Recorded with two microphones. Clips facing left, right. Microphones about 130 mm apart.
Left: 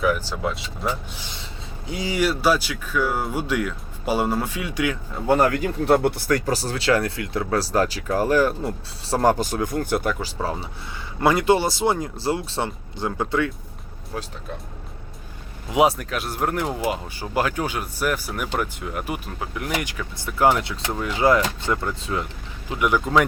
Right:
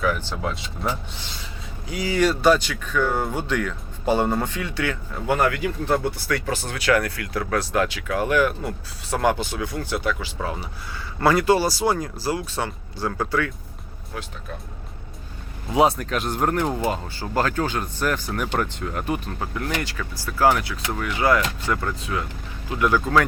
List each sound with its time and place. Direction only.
0.3 s speech: centre (ahead or behind)
1.9 s speech: 25° left (ahead or behind)
2.1 s speech: 5° left (ahead or behind)
5.2 s speech: 30° left (ahead or behind)
5.8 s speech: 65° left (ahead or behind); by 13.5 s 20° left (ahead or behind)
15.7 s speech: 10° left (ahead or behind)